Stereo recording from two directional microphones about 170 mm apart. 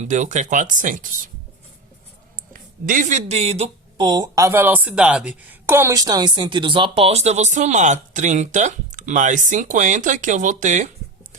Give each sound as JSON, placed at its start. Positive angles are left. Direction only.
{"t": 0.0, "sound": "speech", "side_deg": -45}
{"t": 2.5, "sound": "speech", "side_deg": -55}